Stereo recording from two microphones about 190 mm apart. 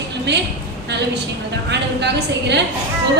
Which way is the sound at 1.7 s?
65° right (ahead or behind).